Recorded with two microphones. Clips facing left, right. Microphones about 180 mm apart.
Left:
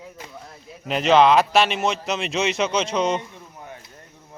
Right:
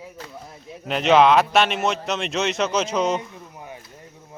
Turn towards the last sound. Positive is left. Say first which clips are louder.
# right 1 dB
turn(degrees=-5)  # may be behind; listen again after turning